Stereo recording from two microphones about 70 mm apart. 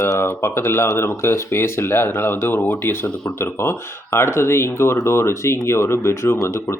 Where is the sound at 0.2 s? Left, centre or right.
Left.